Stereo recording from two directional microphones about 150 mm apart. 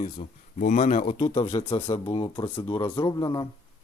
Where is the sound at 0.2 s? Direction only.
50° left (ahead or behind); by 3.4 s 25° left (ahead or behind).